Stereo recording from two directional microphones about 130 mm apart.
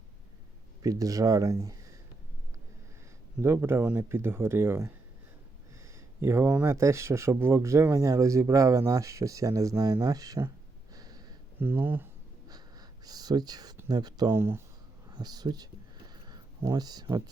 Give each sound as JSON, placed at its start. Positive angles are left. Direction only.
{"t": 0.8, "sound": "speech", "side_deg": -25}
{"t": 3.4, "sound": "speech", "side_deg": -20}
{"t": 6.2, "sound": "speech", "side_deg": -20}
{"t": 10.9, "sound": "a sound", "side_deg": -30}
{"t": 11.6, "sound": "speech", "side_deg": -15}
{"t": 12.5, "sound": "a sound", "side_deg": -30}
{"t": 13.8, "sound": "speech", "side_deg": -30}
{"t": 14.3, "sound": "speech", "side_deg": -20}
{"t": 15.1, "sound": "a sound", "side_deg": -30}
{"t": 16.6, "sound": "speech", "side_deg": -30}